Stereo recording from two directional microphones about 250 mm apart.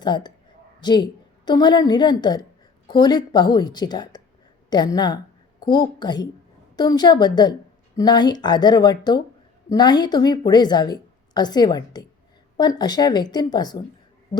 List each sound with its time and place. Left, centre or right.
0.0 s a woman's voice: centre